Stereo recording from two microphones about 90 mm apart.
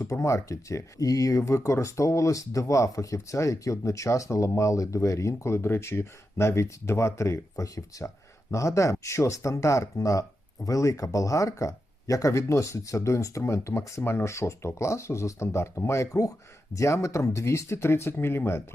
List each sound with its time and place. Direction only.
0.0 s speech: 35° left (ahead or behind)